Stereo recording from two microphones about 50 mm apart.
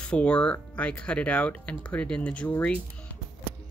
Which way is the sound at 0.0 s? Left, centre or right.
Left.